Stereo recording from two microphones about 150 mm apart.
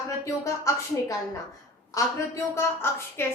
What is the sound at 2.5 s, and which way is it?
Speech, 15° left (ahead or behind).